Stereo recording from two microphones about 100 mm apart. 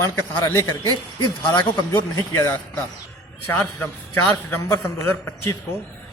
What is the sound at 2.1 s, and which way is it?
A man's voice, 25° left (ahead or behind).